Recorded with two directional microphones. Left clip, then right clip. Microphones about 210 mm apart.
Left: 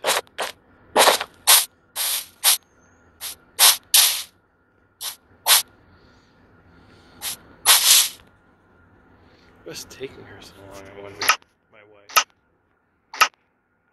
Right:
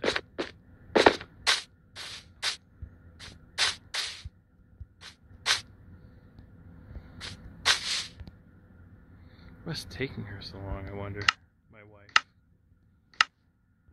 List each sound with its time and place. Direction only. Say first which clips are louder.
0.0 s a sound: left 7 dB; 5° left (ahead or behind)
3.2 s spray: left 9 dB; 5° left (ahead or behind)
7.2 s spray: left 9 dB; 5° left (ahead or behind)
9.7 s speech: left 1 dB; centre (ahead or behind)
11.7 s cap gun: left 6 dB; 5° right (ahead or behind)